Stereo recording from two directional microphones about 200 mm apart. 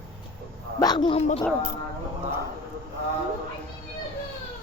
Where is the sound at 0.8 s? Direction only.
20° left (ahead or behind).